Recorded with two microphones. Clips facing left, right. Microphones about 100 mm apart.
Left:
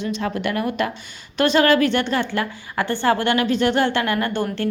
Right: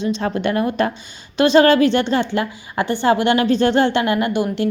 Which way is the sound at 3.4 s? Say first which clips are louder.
Right 3 dB; 30° right (ahead or behind).